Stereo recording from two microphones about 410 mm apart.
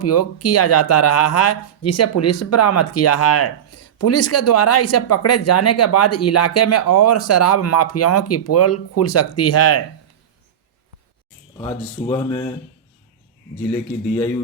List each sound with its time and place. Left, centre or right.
0.0 s speech: left
11.5 s speech: centre